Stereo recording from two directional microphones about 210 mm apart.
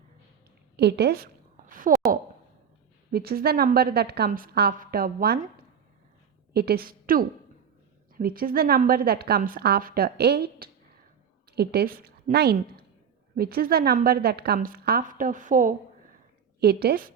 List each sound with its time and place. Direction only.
0.8 s a sound: 50° right (ahead or behind)
3.1 s a woman's voice: 45° right (ahead or behind)
6.5 s a woman's voice: 50° right (ahead or behind)